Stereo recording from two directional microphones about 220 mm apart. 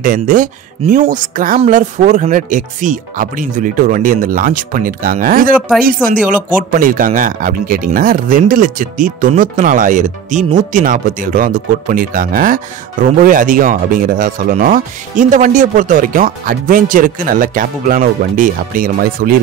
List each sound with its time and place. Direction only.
0.0 s speech: 40° right (ahead or behind)